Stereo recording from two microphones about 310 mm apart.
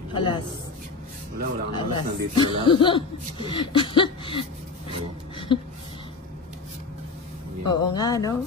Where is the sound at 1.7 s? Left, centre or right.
Centre.